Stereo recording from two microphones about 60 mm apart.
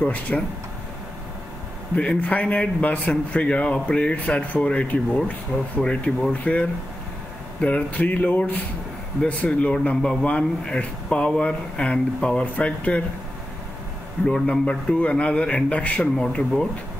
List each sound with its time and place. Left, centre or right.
0.0 s speech: left
2.0 s speech: left
14.2 s speech: centre
16.2 s speech: centre